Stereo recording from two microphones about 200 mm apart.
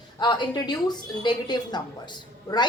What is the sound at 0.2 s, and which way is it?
A woman's voice, 20° left (ahead or behind).